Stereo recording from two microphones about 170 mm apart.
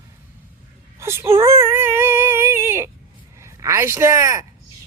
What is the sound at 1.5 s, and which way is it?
Dog, 15° right (ahead or behind).